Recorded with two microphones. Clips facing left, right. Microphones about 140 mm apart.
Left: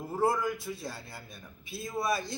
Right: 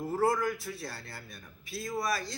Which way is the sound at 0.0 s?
20° left (ahead or behind).